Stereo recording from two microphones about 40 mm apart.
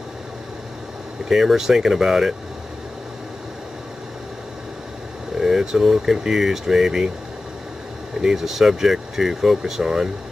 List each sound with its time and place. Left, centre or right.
1.3 s speech: centre
5.4 s speech: centre
8.2 s speech: centre